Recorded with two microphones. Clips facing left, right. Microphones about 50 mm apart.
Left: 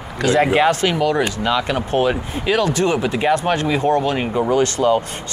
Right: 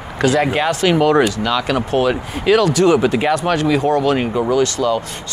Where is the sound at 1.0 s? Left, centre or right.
Right.